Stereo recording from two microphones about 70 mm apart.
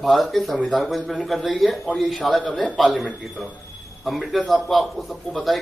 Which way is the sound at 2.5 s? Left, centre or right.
Centre.